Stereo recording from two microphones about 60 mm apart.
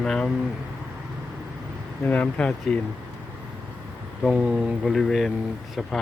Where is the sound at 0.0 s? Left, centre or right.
Centre.